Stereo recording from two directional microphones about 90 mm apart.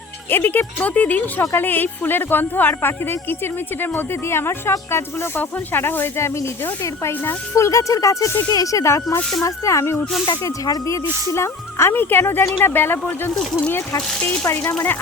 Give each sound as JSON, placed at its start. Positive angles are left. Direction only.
{"t": 0.3, "sound": "speech", "side_deg": 20}
{"t": 10.4, "sound": "speech", "side_deg": 35}